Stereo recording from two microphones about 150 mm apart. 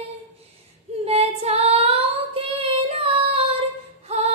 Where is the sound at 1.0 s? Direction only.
40° right (ahead or behind).